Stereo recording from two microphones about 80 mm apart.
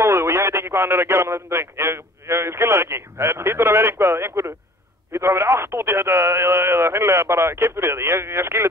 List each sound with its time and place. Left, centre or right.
0.0 s speech: right